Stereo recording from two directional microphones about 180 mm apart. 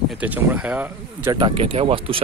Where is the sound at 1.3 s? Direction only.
30° right (ahead or behind).